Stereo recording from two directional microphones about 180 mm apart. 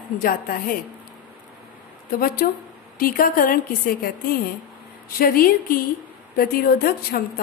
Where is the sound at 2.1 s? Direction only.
55° left (ahead or behind).